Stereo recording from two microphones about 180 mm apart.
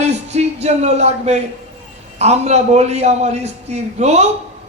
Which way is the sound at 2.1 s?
35° right (ahead or behind).